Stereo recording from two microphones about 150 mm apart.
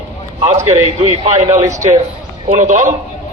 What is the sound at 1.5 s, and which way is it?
Speech, 20° right (ahead or behind).